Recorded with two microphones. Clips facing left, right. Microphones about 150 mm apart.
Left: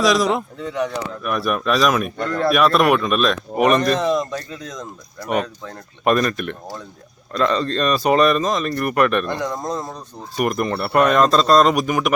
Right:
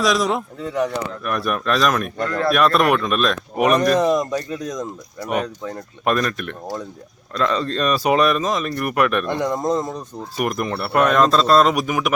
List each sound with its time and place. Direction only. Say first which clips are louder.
0.0 s speech: left 2 dB; centre (ahead or behind)
6.1 s speech: left 3 dB; centre (ahead or behind)
9.5 s speech: right 5 dB; 20° right (ahead or behind)
10.3 s speech: left 2 dB; centre (ahead or behind)